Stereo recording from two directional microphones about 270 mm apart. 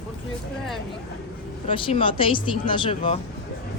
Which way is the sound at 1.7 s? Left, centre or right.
Centre.